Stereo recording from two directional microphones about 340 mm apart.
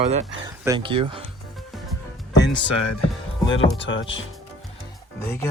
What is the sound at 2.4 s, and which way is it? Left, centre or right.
Music, left.